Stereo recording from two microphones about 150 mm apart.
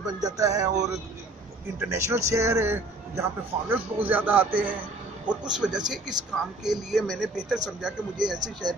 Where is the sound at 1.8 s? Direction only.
20° right (ahead or behind).